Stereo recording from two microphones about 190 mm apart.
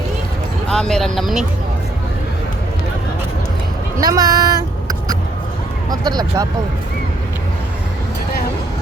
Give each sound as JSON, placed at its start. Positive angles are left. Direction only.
{"t": 0.7, "sound": "speech", "side_deg": 0}
{"t": 4.0, "sound": "speech", "side_deg": -20}